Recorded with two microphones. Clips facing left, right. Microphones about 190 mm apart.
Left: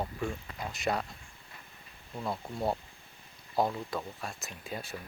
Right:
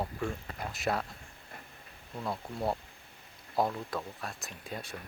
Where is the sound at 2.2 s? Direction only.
Centre (ahead or behind).